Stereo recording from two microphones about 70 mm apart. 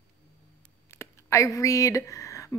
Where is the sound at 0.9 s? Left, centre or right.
Left.